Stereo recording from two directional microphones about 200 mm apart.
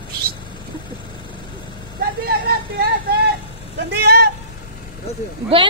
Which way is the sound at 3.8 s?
55° right (ahead or behind).